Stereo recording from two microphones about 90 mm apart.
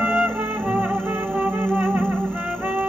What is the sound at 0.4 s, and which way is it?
Music, 15° right (ahead or behind).